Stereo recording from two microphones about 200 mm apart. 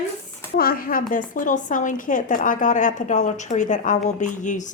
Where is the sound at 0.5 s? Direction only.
45° left (ahead or behind).